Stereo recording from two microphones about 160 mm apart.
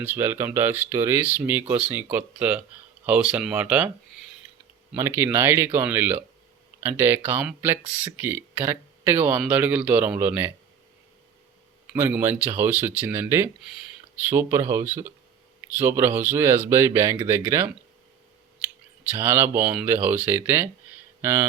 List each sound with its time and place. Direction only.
0.0 s speech: 15° right (ahead or behind)
11.9 s speech: 15° right (ahead or behind)
19.1 s speech: 15° right (ahead or behind)